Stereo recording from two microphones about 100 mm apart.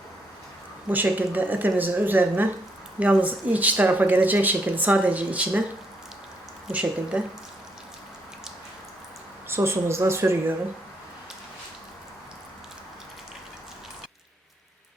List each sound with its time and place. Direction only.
0.9 s speech: 15° right (ahead or behind)
6.7 s speech: 10° right (ahead or behind)
9.5 s speech: 25° right (ahead or behind)